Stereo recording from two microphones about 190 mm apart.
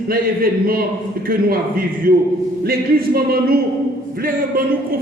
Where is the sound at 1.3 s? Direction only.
50° right (ahead or behind).